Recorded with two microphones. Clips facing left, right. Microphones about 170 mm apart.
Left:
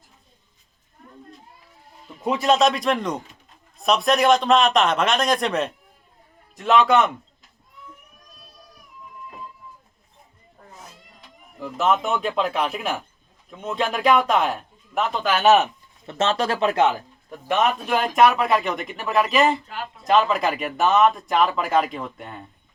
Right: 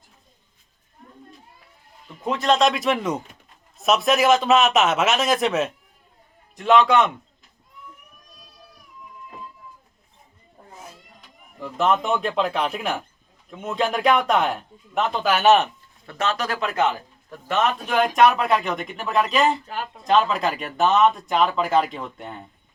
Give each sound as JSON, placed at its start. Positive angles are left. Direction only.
{"t": 2.2, "sound": "speech", "side_deg": 10}
{"t": 11.6, "sound": "speech", "side_deg": 5}
{"t": 16.0, "sound": "speech", "side_deg": 25}
{"t": 17.2, "sound": "speech", "side_deg": 15}